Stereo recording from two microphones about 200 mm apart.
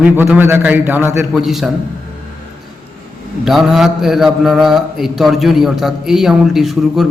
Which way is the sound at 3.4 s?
Centre (ahead or behind).